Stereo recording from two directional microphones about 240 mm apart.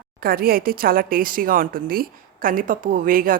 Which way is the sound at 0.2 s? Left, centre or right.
Right.